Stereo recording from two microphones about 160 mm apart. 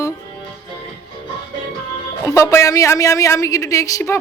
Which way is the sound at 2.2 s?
20° left (ahead or behind).